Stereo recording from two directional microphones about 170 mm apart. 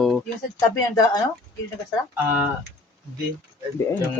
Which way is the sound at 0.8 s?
20° left (ahead or behind).